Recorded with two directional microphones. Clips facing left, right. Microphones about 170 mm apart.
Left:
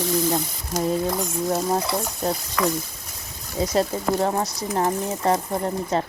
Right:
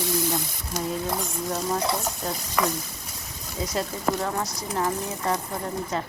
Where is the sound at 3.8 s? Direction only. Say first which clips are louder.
Left 5 dB; 30° left (ahead or behind).